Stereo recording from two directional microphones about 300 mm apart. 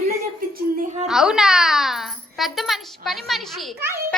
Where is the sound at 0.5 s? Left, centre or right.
Right.